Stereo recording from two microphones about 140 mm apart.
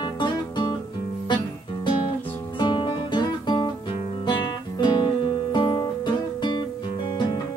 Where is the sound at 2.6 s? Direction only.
35° left (ahead or behind).